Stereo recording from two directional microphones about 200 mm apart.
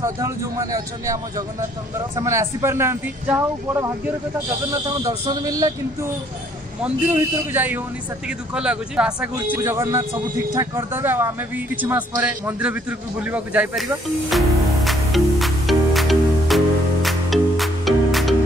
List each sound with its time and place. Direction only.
0.0 s speech: 15° right (ahead or behind)
5.2 s speech: 20° right (ahead or behind)
6.8 s speech: 10° right (ahead or behind)
14.3 s music: centre (ahead or behind)